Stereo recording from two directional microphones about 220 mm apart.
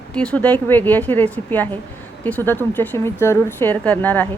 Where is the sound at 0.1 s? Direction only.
5° left (ahead or behind).